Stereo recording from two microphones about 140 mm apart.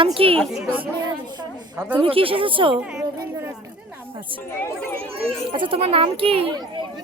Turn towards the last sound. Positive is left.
turn(degrees=-40)  # may be behind; listen again after turning